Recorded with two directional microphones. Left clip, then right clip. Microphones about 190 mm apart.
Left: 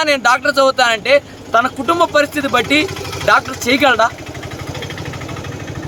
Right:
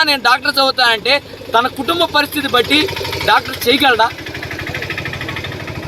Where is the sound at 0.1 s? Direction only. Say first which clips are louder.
Even; 5° left (ahead or behind).